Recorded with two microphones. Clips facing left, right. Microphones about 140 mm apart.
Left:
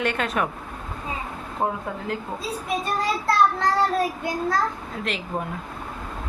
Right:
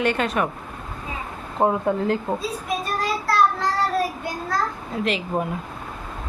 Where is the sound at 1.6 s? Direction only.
25° right (ahead or behind).